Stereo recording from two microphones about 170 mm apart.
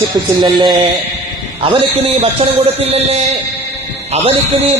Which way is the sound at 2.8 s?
35° right (ahead or behind).